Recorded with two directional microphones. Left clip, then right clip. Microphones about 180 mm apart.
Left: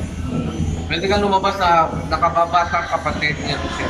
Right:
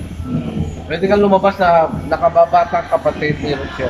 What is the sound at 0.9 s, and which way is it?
A man's voice, 50° right (ahead or behind).